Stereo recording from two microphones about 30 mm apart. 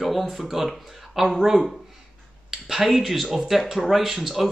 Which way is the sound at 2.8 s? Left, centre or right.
Centre.